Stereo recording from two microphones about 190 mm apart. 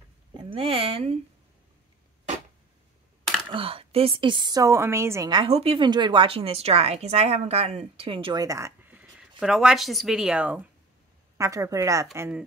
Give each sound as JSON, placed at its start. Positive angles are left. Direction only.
{"t": 0.4, "sound": "speech", "side_deg": -30}
{"t": 3.5, "sound": "a woman's voice", "side_deg": -30}